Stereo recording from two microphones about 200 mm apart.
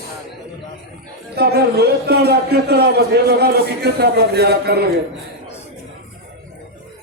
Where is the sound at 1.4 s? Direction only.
55° right (ahead or behind).